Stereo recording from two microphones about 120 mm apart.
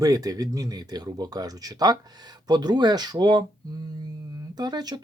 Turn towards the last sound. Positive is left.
turn(degrees=-35)  # may be behind; listen again after turning